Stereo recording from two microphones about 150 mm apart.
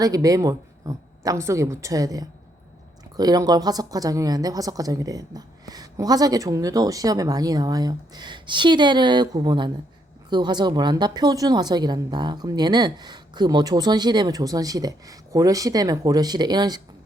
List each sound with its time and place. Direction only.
0.0 s a woman's voice: 25° right (ahead or behind)